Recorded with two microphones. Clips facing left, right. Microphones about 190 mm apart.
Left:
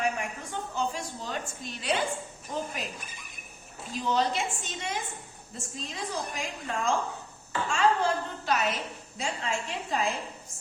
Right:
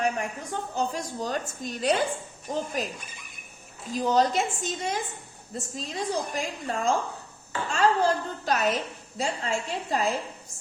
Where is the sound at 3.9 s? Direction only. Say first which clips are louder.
Right 5 dB; 40° right (ahead or behind).